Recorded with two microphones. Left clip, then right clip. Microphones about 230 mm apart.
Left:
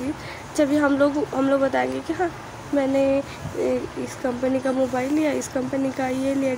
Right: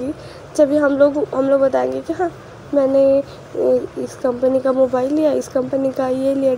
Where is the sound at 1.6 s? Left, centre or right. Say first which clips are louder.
Right 6 dB; left.